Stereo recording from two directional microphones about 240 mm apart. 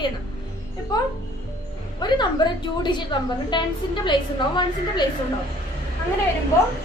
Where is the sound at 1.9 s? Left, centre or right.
Centre.